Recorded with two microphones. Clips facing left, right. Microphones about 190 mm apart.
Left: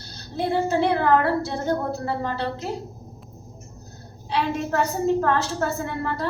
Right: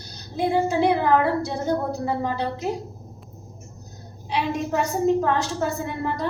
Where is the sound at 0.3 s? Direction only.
15° right (ahead or behind).